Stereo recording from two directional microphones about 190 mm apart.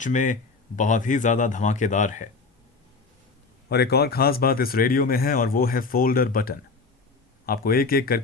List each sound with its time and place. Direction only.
0.0 s speech: 40° left (ahead or behind)
3.7 s speech: 55° left (ahead or behind)